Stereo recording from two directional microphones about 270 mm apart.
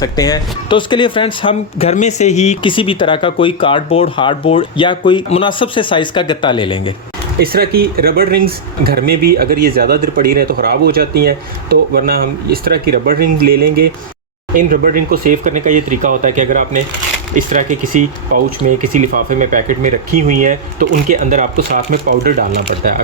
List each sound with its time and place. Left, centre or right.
0.0 s speech: centre
7.3 s speech: right